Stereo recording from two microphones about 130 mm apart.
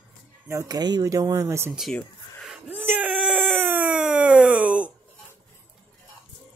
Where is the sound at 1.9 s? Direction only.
Centre (ahead or behind).